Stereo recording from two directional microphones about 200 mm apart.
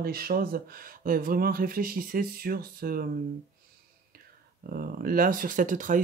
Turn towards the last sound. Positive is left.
turn(degrees=-40)  # may be behind; listen again after turning